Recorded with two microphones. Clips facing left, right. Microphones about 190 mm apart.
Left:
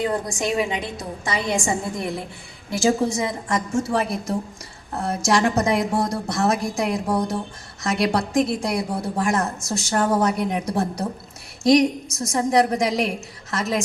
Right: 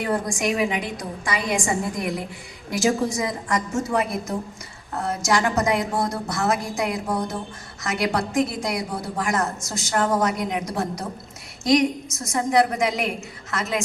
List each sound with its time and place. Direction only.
0.0 s a woman's voice: 20° left (ahead or behind)